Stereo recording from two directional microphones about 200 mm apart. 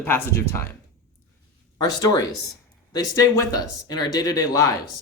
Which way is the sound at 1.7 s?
20° left (ahead or behind).